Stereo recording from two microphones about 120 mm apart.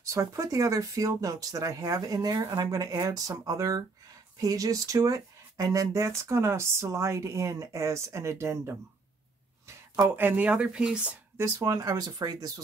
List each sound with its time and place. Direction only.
0.0 s speech: 25° right (ahead or behind); by 11.1 s 5° right (ahead or behind)
11.3 s speech: 30° right (ahead or behind)